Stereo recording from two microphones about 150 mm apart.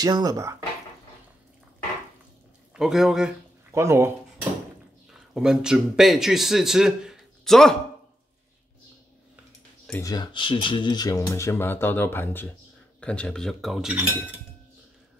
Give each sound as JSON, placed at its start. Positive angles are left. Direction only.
{"t": 0.0, "sound": "speech", "side_deg": -25}
{"t": 2.7, "sound": "a man's voice", "side_deg": 0}
{"t": 3.7, "sound": "speech", "side_deg": -20}
{"t": 5.3, "sound": "a man's voice", "side_deg": -5}
{"t": 9.9, "sound": "a man's voice", "side_deg": 25}